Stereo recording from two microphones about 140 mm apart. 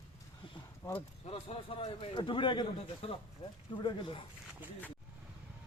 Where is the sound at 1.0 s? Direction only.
45° left (ahead or behind).